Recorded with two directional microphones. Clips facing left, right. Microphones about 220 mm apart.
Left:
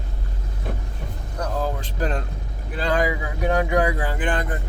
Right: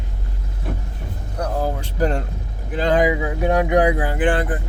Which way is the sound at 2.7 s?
20° right (ahead or behind).